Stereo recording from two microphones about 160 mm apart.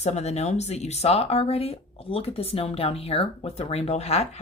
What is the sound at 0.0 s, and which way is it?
Speech, 45° left (ahead or behind).